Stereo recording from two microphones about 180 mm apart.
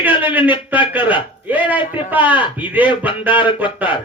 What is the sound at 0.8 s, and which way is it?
Speech, 25° left (ahead or behind).